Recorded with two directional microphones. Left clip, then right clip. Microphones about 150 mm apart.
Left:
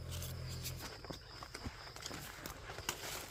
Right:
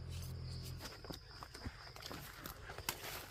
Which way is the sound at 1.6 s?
5° right (ahead or behind).